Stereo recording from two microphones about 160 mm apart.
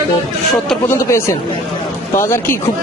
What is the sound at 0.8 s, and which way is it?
Speech, 15° left (ahead or behind).